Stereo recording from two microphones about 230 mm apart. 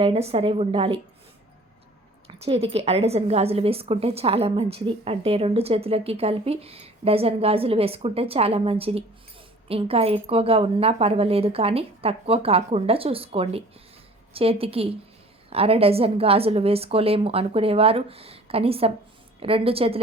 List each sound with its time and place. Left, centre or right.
0.0 s a woman's voice: right
2.2 s a woman's voice: right